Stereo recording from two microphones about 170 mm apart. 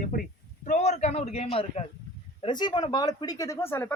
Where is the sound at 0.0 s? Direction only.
55° left (ahead or behind); by 1.8 s 40° left (ahead or behind).